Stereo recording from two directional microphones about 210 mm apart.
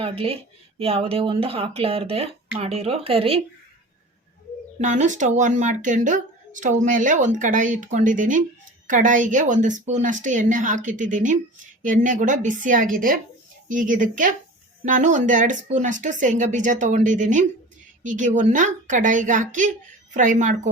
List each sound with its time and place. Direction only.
0.0 s speech: 25° right (ahead or behind)
4.8 s speech: 35° right (ahead or behind)